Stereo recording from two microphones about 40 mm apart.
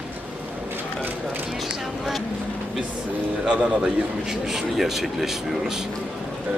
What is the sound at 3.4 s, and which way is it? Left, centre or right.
Speech, right.